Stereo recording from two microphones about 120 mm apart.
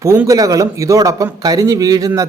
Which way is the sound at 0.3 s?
30° right (ahead or behind).